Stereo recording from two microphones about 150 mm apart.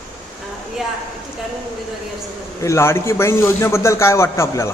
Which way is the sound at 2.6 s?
20° left (ahead or behind).